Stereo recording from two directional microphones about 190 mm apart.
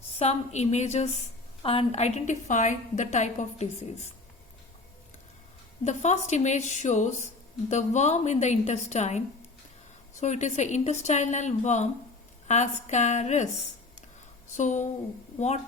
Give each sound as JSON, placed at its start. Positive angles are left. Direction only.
{"t": 0.2, "sound": "a woman's voice", "side_deg": 35}
{"t": 5.8, "sound": "a woman's voice", "side_deg": 40}
{"t": 14.5, "sound": "a woman's voice", "side_deg": 40}